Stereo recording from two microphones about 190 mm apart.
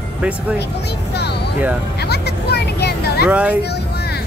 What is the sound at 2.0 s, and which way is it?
Vehicle, 60° left (ahead or behind).